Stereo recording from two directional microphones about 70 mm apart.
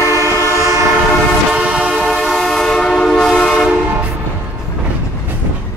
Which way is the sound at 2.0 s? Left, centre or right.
Centre.